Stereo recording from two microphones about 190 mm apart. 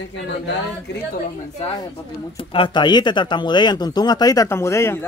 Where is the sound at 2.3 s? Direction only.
25° left (ahead or behind).